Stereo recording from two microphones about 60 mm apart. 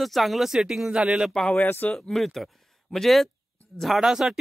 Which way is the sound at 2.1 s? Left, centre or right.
Centre.